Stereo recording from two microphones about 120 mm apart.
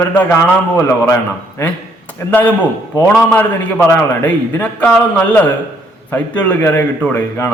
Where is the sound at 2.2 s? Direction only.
20° left (ahead or behind).